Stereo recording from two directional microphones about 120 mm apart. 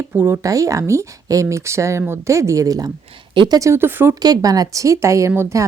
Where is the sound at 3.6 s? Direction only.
20° right (ahead or behind).